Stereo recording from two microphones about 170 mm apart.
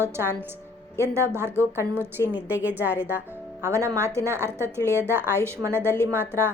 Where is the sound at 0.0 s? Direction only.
15° right (ahead or behind).